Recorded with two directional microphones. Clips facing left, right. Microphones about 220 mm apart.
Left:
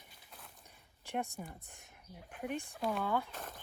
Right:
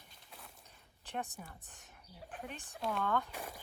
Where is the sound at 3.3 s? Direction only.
10° right (ahead or behind).